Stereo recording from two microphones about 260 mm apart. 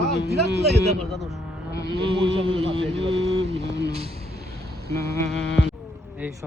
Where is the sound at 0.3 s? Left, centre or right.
Right.